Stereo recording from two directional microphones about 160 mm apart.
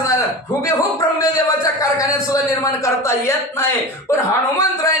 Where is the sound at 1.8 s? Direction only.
20° left (ahead or behind).